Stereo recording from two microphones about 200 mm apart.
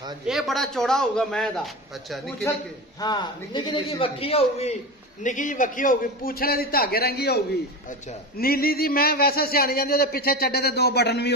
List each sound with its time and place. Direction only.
0.3 s a man's voice: centre (ahead or behind)
3.0 s a man's voice: 20° left (ahead or behind); by 11.3 s 55° left (ahead or behind)